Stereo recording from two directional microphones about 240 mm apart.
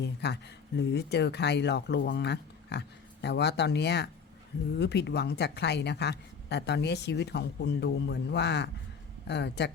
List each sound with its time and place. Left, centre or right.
0.0 s a woman's voice: left